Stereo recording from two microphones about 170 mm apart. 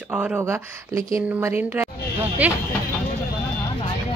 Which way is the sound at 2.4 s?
10° right (ahead or behind).